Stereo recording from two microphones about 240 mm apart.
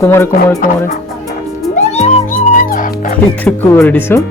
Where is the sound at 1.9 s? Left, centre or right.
Left.